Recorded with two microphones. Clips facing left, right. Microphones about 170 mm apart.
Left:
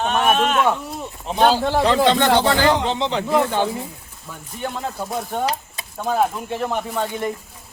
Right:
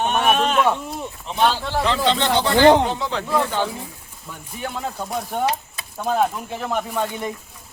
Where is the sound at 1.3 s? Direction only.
40° left (ahead or behind); by 2.5 s 55° left (ahead or behind).